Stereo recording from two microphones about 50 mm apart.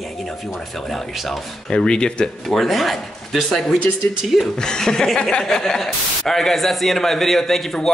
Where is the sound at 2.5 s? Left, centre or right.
Centre.